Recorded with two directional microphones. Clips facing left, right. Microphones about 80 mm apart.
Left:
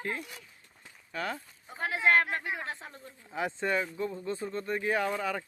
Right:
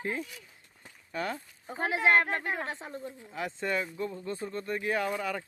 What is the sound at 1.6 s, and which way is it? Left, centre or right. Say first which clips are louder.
Speech: right 3 dB; right.